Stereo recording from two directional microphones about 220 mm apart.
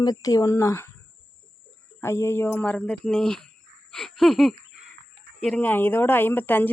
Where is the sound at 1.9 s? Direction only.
10° left (ahead or behind).